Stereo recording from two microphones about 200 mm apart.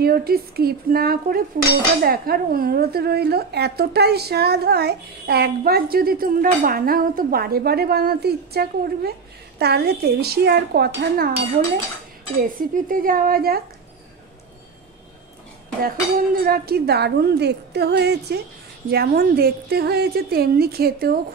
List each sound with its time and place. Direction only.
0.0 s speech: 50° right (ahead or behind)
15.8 s speech: 45° right (ahead or behind)